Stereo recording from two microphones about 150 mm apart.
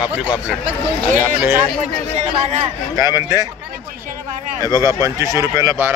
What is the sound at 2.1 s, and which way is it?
Speech, 50° right (ahead or behind).